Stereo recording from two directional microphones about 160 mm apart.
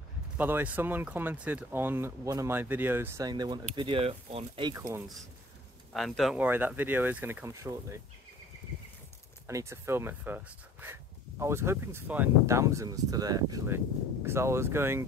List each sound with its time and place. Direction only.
0.4 s speech: 10° right (ahead or behind)
3.3 s speech: 25° right (ahead or behind)
5.9 s speech: centre (ahead or behind); by 8.0 s 20° right (ahead or behind)
9.5 s speech: 20° right (ahead or behind)